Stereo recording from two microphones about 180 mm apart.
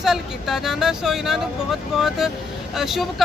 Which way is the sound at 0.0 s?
Centre (ahead or behind).